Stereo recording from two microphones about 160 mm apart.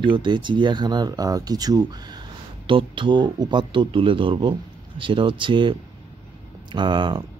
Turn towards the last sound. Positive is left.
turn(degrees=-30)  # may be behind; listen again after turning